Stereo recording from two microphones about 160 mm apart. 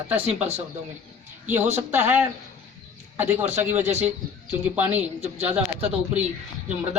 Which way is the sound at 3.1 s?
10° right (ahead or behind).